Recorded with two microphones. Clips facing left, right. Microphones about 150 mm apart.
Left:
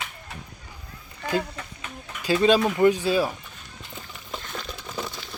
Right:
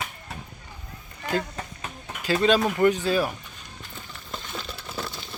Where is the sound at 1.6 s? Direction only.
40° right (ahead or behind).